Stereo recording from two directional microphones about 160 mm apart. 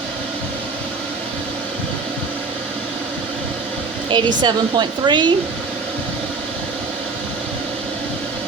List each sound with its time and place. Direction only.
4.1 s speech: 30° right (ahead or behind)